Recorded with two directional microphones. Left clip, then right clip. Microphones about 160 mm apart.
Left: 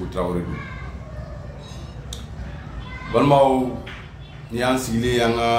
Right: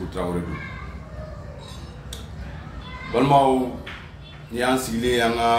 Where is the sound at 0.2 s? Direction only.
15° left (ahead or behind).